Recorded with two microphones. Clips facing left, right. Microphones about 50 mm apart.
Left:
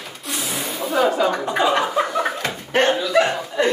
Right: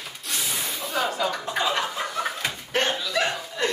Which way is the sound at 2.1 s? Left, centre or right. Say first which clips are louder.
Left 6 dB; centre.